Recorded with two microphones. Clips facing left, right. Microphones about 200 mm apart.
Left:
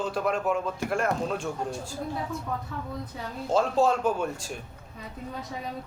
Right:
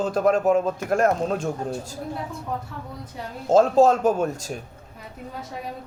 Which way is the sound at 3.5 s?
40° right (ahead or behind).